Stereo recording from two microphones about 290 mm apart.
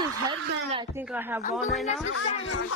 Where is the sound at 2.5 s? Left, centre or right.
Left.